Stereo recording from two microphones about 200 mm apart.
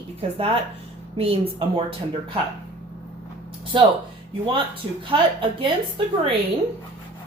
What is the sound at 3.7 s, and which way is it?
A woman's voice, 25° right (ahead or behind).